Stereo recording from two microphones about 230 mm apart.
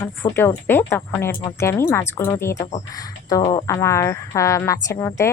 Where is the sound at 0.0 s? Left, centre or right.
Centre.